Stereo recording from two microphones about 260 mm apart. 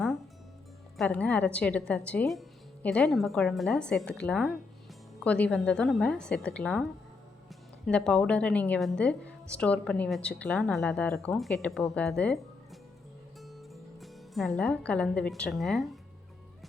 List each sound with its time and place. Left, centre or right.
0.9 s a woman's voice: centre
7.9 s a woman's voice: centre